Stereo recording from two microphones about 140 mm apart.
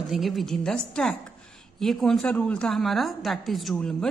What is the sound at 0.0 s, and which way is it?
A woman's voice, centre (ahead or behind).